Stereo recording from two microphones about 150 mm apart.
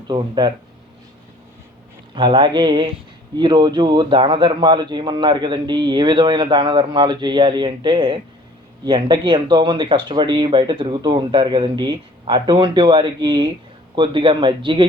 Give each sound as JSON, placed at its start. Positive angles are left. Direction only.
{"t": 0.1, "sound": "speech", "side_deg": -30}
{"t": 2.1, "sound": "a man's voice", "side_deg": -35}